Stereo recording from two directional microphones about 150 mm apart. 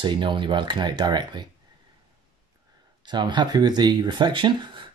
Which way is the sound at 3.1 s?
30° right (ahead or behind).